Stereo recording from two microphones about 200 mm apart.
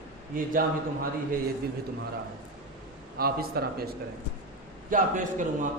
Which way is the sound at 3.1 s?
50° right (ahead or behind).